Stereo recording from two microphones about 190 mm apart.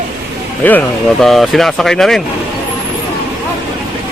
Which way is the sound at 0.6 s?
5° left (ahead or behind).